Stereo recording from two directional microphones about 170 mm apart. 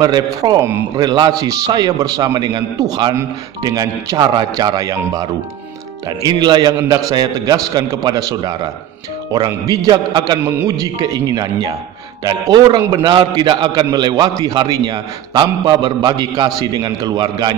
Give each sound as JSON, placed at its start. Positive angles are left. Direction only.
{"t": 0.0, "sound": "a man's voice", "side_deg": -25}
{"t": 1.0, "sound": "a man's voice", "side_deg": -25}